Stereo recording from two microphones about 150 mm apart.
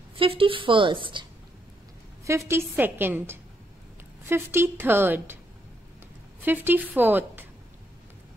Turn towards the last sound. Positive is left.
turn(degrees=-10)  # may be behind; listen again after turning